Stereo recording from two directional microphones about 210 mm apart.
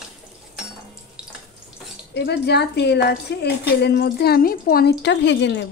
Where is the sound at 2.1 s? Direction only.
50° left (ahead or behind).